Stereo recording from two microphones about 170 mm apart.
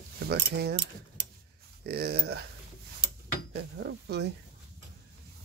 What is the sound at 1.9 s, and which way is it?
Speech, 70° right (ahead or behind).